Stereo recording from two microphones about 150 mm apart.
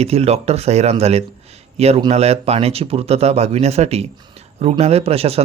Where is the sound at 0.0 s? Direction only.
45° right (ahead or behind).